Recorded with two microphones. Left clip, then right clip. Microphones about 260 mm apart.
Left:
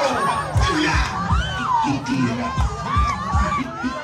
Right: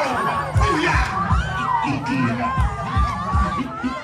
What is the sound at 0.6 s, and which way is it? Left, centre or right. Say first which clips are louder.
Music: right 3 dB; centre.